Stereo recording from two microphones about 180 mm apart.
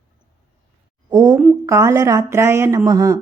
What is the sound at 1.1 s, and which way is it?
A woman's voice, 20° right (ahead or behind).